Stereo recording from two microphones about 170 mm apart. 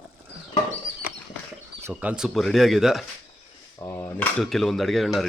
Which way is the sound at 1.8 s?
5° right (ahead or behind).